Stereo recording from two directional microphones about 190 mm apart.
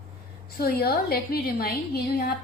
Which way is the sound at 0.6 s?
55° left (ahead or behind).